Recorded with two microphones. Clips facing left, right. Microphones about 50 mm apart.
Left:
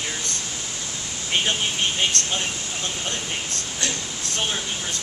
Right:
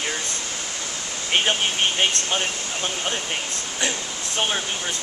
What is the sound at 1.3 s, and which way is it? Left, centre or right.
Speech, right.